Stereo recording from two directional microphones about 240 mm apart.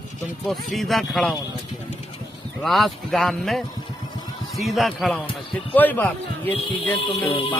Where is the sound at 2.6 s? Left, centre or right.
Centre.